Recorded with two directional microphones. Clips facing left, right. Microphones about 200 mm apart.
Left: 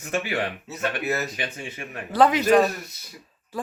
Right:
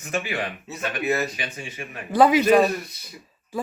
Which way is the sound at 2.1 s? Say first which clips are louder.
Right 2 dB; 10° right (ahead or behind).